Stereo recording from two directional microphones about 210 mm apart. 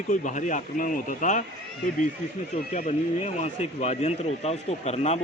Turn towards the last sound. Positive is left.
turn(degrees=30)  # may be behind; listen again after turning